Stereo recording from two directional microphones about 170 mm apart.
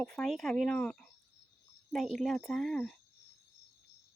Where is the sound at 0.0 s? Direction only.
Centre (ahead or behind).